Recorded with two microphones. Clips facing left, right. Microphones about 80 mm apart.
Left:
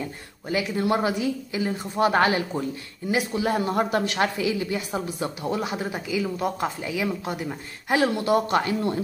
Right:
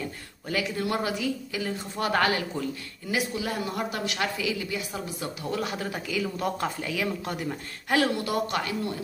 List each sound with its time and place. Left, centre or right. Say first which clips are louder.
0.5 s a woman's voice: left 4 dB; left
8.3 s speech: left 6 dB; left